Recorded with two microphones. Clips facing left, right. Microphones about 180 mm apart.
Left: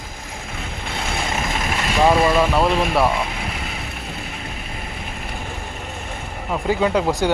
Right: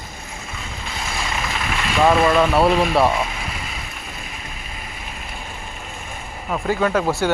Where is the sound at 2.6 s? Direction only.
Centre (ahead or behind).